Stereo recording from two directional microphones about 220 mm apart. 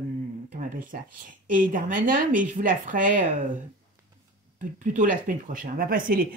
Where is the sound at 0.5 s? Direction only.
35° right (ahead or behind).